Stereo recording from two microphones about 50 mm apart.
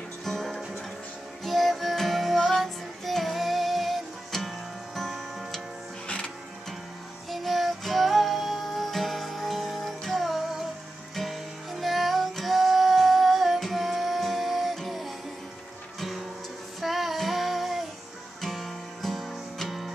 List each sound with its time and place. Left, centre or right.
0.2 s music: centre
6.0 s music: left
7.2 s music: centre
16.8 s child singing: centre
18.4 s guitar: centre